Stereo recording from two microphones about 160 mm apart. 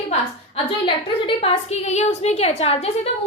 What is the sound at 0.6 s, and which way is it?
A woman's voice, 35° left (ahead or behind).